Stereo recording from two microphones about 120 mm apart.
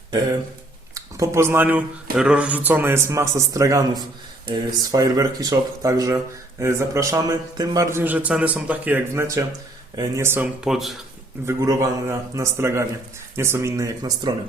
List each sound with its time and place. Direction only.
0.9 s speech: 25° right (ahead or behind)
9.9 s speech: 35° right (ahead or behind)
10.2 s speech: 15° right (ahead or behind)
11.4 s speech: 25° right (ahead or behind)